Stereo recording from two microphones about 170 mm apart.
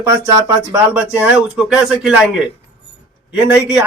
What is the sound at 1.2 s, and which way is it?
A man's voice, 10° right (ahead or behind).